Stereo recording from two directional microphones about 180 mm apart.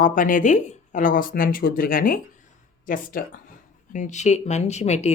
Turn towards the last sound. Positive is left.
turn(degrees=40)  # may be behind; listen again after turning